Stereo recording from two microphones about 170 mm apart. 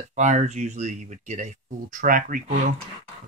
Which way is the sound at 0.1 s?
45° right (ahead or behind).